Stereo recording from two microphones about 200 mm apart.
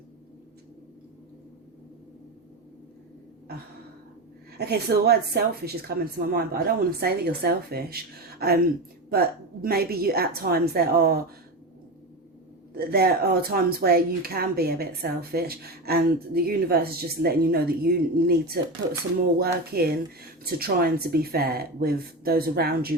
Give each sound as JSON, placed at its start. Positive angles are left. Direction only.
{"t": 4.5, "sound": "speech", "side_deg": -55}
{"t": 12.7, "sound": "speech", "side_deg": -50}